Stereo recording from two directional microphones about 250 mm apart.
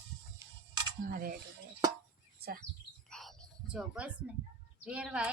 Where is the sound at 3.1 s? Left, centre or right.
Centre.